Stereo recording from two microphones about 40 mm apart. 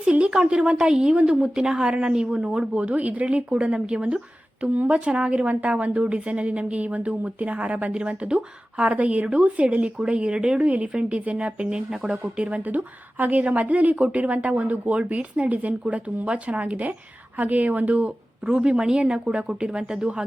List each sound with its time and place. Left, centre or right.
0.1 s speech: right
4.6 s speech: right
4.9 s speech: right
12.6 s speech: right
17.3 s a woman's voice: right
18.5 s speech: right